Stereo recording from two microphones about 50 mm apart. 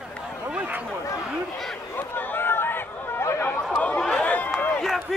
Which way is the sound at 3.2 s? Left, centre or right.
Left.